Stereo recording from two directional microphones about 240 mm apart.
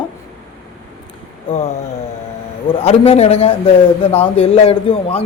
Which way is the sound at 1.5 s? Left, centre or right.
Left.